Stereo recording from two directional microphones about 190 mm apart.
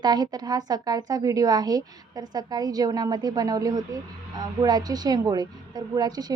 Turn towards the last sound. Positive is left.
turn(degrees=-20)  # may be behind; listen again after turning